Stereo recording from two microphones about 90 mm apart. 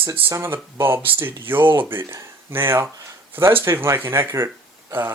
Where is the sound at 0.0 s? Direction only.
25° right (ahead or behind).